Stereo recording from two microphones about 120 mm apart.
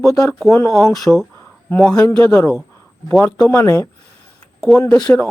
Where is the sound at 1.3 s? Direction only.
15° left (ahead or behind).